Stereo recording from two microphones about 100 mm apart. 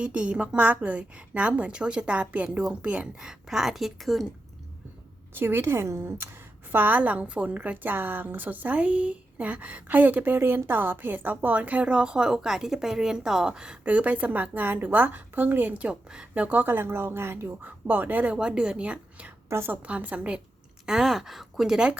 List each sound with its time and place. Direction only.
0.0 s a woman's voice: 10° right (ahead or behind)
5.3 s a woman's voice: 20° right (ahead or behind)
19.5 s a woman's voice: 25° right (ahead or behind); by 21.9 s 5° right (ahead or behind)